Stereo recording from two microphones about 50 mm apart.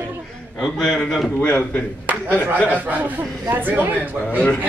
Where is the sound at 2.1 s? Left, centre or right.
Right.